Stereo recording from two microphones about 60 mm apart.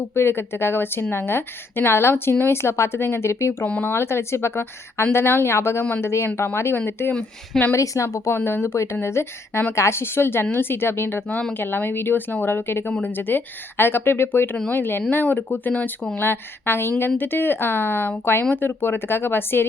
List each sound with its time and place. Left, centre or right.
0.1 s a woman's voice: left
7.7 s a woman's voice: left
8.4 s a woman's voice: left
16.1 s speech: left